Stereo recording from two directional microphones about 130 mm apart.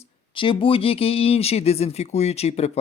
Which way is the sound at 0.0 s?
45° left (ahead or behind).